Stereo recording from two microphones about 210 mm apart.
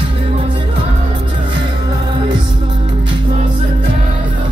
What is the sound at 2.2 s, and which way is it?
Music, 20° right (ahead or behind).